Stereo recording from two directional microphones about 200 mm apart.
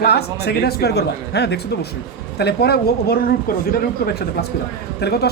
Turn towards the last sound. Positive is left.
turn(degrees=55)  # may be behind; listen again after turning